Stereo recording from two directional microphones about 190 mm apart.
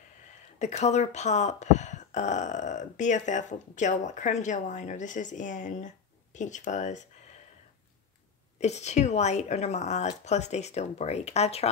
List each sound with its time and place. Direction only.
0.6 s speech: 35° left (ahead or behind)
8.5 s speech: 35° left (ahead or behind)